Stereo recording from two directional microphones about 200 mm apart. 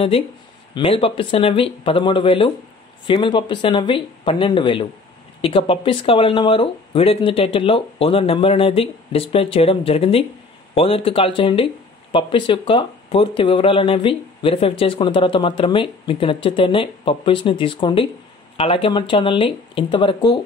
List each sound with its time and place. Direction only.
0.7 s speech: 25° left (ahead or behind)